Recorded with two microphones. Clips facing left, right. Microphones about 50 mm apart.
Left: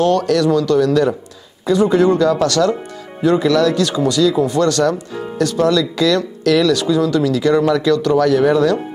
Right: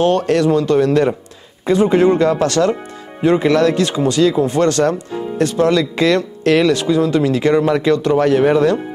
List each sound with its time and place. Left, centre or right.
0.0 s speech: right